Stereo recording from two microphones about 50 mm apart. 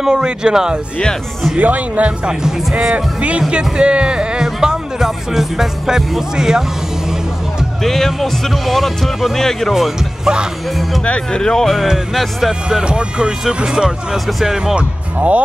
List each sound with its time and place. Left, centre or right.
0.0 s speech: centre
1.6 s speech: right; by 6.6 s centre
7.8 s speech: centre
9.8 s speech: centre
11.1 s speech: left
12.1 s speech: centre
12.6 s speech: centre